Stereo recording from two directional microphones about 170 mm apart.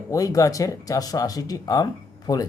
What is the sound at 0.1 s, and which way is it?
Speech, 20° left (ahead or behind).